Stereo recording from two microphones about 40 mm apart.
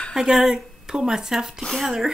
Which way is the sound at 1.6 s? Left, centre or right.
Centre.